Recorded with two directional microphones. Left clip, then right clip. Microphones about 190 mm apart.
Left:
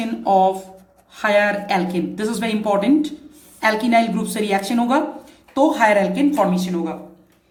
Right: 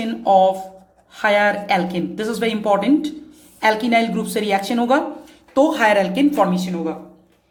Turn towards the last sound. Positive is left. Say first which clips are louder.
# right 1 dB
turn(degrees=-35)  # may be behind; listen again after turning